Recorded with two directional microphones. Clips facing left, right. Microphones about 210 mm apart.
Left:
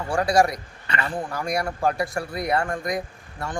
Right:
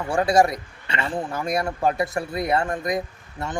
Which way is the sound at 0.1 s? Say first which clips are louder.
Right 1 dB; 25° right (ahead or behind).